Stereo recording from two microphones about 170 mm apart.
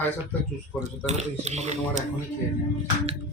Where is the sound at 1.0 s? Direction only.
40° right (ahead or behind).